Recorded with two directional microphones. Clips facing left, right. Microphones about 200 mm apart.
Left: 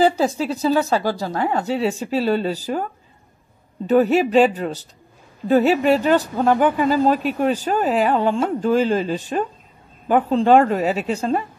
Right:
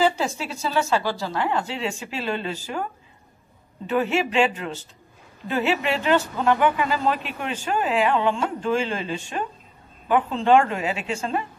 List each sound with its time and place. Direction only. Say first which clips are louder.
0.0 s speech: left 5 dB; 35° left (ahead or behind)
3.8 s speech: left 7 dB; 40° left (ahead or behind)